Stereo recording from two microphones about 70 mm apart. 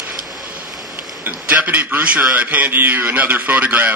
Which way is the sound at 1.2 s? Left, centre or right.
Right.